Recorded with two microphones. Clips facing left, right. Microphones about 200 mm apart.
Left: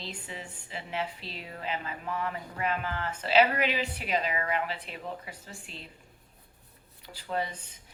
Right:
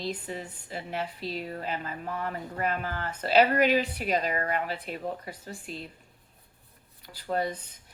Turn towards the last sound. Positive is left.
turn(degrees=-45)  # may be behind; listen again after turning